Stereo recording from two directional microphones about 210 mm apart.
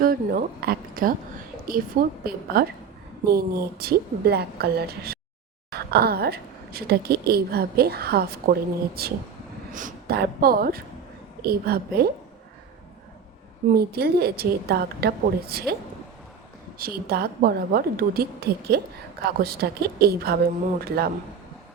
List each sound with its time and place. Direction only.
0.0 s a woman's voice: 45° right (ahead or behind)
13.7 s a woman's voice: 50° right (ahead or behind)
16.7 s a woman's voice: 45° right (ahead or behind)